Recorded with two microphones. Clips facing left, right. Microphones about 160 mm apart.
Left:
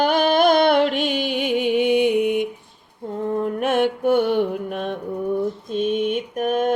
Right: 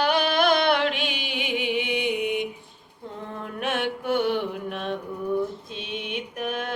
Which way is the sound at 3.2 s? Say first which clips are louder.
Left 9 dB; 45° left (ahead or behind).